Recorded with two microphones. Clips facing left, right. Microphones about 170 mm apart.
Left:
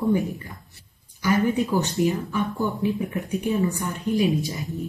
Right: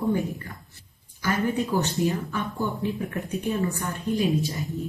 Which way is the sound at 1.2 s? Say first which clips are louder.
Left 4 dB; 15° left (ahead or behind).